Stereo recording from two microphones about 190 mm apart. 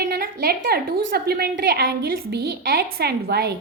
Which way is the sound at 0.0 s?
55° right (ahead or behind).